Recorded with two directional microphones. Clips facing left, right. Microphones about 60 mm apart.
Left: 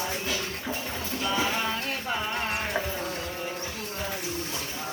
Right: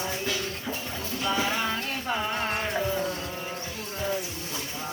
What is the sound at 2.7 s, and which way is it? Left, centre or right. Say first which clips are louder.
Insect: right 2 dB; centre.